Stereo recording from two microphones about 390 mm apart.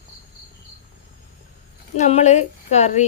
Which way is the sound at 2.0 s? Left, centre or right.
Centre.